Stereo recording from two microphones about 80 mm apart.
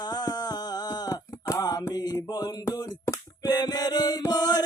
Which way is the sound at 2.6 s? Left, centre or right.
Left.